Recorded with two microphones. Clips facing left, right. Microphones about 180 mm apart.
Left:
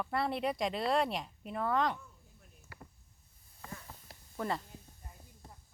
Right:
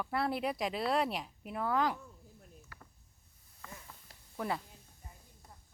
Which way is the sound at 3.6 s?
35° left (ahead or behind).